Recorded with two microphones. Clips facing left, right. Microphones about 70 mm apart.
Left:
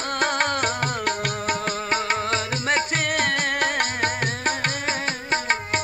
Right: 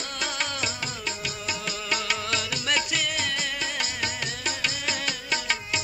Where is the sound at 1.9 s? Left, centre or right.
Left.